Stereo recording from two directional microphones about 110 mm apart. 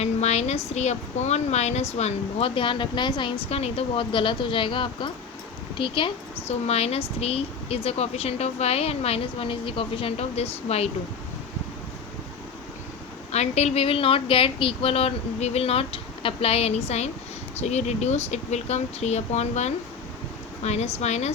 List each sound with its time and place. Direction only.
0.0 s a woman's voice: 80° left
2.6 s speech: 50° left (ahead or behind)
3.5 s speech: 65° left (ahead or behind); by 6.1 s 50° left (ahead or behind)
6.5 s a woman's voice: 70° left (ahead or behind)
13.3 s speech: 85° left
17.6 s a woman's voice: 90° left